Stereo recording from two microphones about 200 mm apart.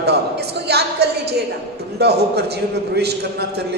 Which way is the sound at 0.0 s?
55° right (ahead or behind).